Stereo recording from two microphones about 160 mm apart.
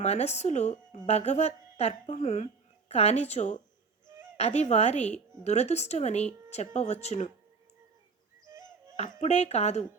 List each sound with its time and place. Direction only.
0.0 s a woman's voice: 45° left (ahead or behind)
9.2 s speech: 45° left (ahead or behind)